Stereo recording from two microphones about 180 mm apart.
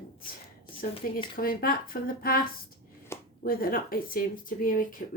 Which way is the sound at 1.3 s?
50° left (ahead or behind).